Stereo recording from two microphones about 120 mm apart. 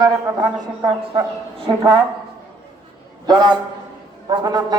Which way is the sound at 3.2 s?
35° right (ahead or behind).